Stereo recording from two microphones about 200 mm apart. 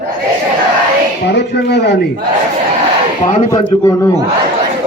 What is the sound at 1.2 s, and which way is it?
Speech, 60° left (ahead or behind).